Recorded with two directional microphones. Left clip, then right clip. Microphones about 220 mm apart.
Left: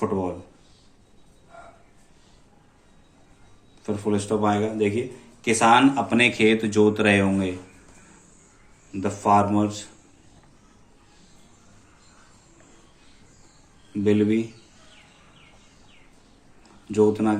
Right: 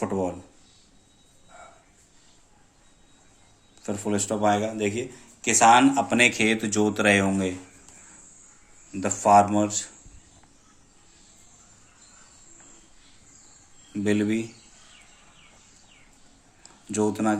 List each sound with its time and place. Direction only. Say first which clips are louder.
0.0 s a man's voice: left 2 dB; 25° right (ahead or behind)
3.8 s a man's voice: left 2 dB; 25° right (ahead or behind)
8.9 s a man's voice: right 1 dB; 30° right (ahead or behind)
14.0 s a man's voice: left 4 dB; 25° right (ahead or behind)
16.9 s a man's voice: left 5 dB; 30° right (ahead or behind)